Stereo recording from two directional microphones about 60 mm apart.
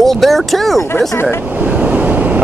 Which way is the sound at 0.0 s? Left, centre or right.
Centre.